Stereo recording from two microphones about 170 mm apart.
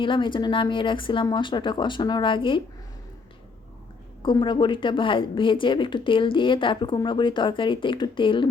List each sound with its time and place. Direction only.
0.0 s a woman's voice: 30° left (ahead or behind)
4.2 s a woman's voice: 30° left (ahead or behind)